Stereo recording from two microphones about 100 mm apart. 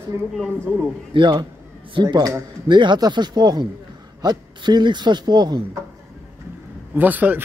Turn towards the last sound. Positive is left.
turn(degrees=-15)  # may be behind; listen again after turning